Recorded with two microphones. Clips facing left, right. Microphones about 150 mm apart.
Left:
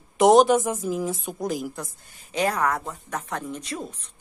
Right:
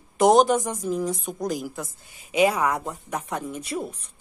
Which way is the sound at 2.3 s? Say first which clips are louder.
Right 3 dB; 10° right (ahead or behind).